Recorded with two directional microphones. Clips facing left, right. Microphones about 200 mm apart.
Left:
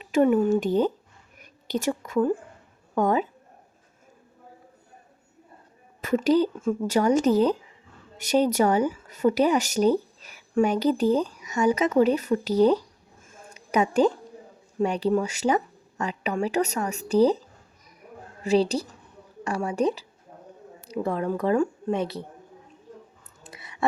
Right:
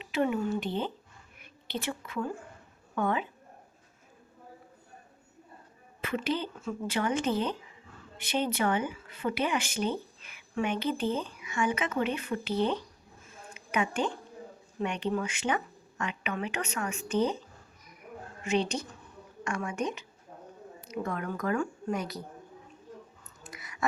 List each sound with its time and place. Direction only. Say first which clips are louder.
0.0 s speech: left 9 dB; 45° left (ahead or behind)
6.0 s speech: left 10 dB; 40° left (ahead or behind)
13.2 s a sound: left 1 dB; 45° left (ahead or behind)
14.8 s speech: left 8 dB; 35° left (ahead or behind)
18.4 s speech: left 7 dB; 35° left (ahead or behind)
23.4 s a sound: left 1 dB; 30° left (ahead or behind)